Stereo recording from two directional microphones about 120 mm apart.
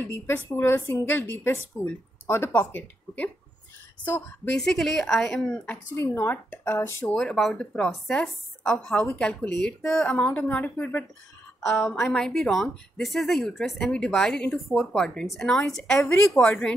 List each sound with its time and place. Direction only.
0.1 s a woman's voice: 20° left (ahead or behind)
4.6 s a woman's voice: 5° left (ahead or behind)
5.9 s a woman's voice: 20° left (ahead or behind)
7.1 s speech: 5° left (ahead or behind)
11.6 s a woman's voice: 5° left (ahead or behind)